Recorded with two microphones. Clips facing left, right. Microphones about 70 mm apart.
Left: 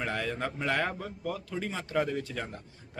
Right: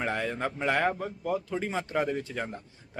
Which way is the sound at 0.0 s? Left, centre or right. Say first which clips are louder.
Right 2 dB; centre.